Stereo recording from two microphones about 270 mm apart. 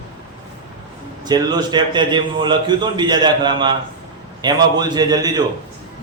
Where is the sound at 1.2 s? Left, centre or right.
Centre.